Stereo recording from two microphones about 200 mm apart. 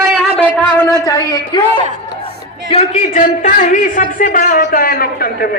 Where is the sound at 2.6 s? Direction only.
30° left (ahead or behind); by 5.5 s 50° left (ahead or behind).